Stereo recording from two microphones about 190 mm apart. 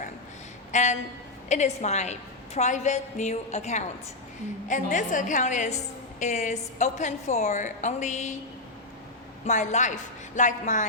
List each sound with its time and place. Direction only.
0.7 s a woman's voice: 40° left (ahead or behind)
9.5 s a woman's voice: 40° left (ahead or behind)